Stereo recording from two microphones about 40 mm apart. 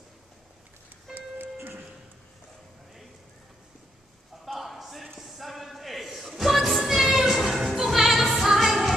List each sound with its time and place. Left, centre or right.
1.1 s music: right
4.5 s clip-clop: centre
5.2 s music: centre